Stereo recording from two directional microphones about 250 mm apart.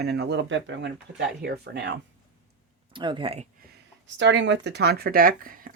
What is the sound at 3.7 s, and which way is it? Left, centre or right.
Speech, right.